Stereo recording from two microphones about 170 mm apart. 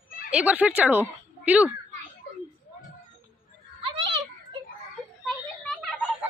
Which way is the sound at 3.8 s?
30° right (ahead or behind).